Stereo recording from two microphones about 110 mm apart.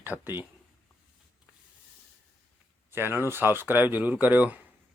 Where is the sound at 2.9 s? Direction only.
20° right (ahead or behind).